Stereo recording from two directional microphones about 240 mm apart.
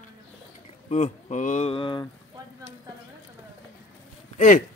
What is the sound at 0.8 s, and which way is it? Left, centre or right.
Speech, left.